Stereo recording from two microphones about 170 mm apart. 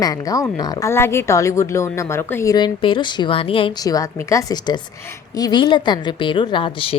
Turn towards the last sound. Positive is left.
turn(degrees=30)  # may be behind; listen again after turning